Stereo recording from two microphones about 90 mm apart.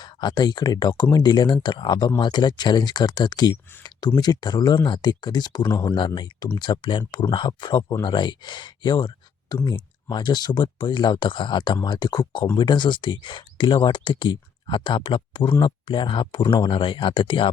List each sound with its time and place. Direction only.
0.0 s speech: 55° left (ahead or behind)
3.5 s speech: 25° left (ahead or behind)
3.8 s speech: 50° left (ahead or behind); by 17.5 s 65° left (ahead or behind)